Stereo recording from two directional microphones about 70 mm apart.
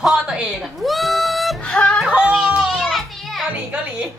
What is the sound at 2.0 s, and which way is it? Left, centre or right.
Yodeling, centre.